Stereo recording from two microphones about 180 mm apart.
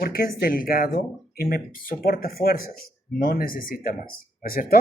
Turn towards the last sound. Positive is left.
turn(degrees=50)  # may be behind; listen again after turning